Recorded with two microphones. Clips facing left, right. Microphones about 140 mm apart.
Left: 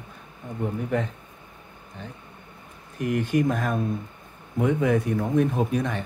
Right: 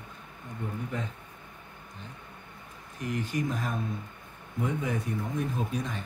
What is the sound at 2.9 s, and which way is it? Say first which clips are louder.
Speech: left 8 dB; 65° left (ahead or behind).